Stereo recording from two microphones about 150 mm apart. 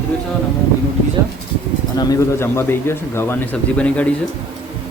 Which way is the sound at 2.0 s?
20° left (ahead or behind).